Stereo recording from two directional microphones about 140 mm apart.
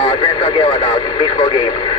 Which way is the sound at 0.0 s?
40° left (ahead or behind).